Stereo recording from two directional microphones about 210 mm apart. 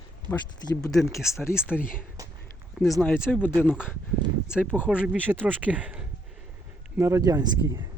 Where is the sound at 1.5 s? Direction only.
5° right (ahead or behind).